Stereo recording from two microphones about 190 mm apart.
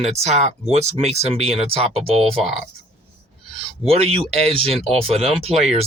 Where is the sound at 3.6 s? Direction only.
30° right (ahead or behind).